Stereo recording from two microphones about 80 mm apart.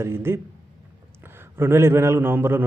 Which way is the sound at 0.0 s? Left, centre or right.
Right.